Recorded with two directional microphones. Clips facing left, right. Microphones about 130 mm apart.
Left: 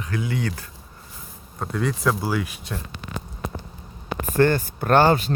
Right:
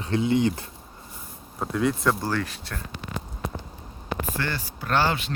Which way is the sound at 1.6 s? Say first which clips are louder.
Right 1 dB; centre (ahead or behind).